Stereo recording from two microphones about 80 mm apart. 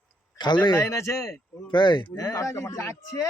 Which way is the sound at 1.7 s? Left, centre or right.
Left.